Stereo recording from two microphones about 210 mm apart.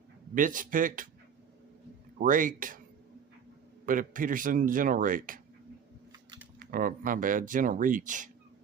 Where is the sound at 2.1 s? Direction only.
40° right (ahead or behind).